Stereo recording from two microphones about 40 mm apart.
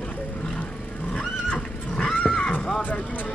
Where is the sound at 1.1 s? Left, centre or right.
Left.